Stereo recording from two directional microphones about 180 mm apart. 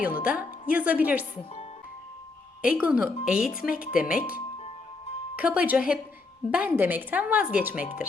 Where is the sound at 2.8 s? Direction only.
5° right (ahead or behind).